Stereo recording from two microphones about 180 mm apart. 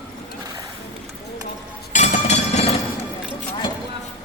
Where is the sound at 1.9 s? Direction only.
40° left (ahead or behind).